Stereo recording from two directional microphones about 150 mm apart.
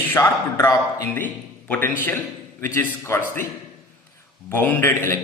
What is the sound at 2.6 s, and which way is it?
Speech, 15° left (ahead or behind).